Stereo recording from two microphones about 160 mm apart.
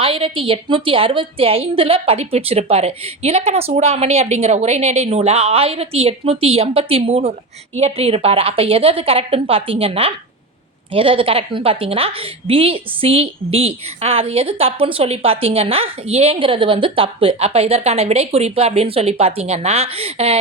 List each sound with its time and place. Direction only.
0.0 s a woman's voice: 35° right (ahead or behind)